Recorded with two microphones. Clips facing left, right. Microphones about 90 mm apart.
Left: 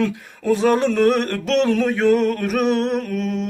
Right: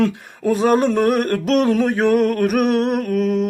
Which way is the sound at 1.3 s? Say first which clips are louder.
Right 2 dB; 40° right (ahead or behind).